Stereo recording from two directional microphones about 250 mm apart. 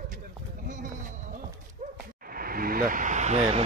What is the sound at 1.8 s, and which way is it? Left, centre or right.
Dog, right.